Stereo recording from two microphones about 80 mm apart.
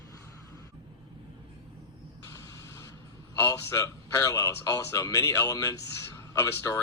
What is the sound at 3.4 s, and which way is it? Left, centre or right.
A man's voice, left.